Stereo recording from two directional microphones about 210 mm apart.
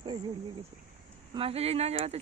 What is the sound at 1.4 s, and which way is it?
Speech, 30° right (ahead or behind).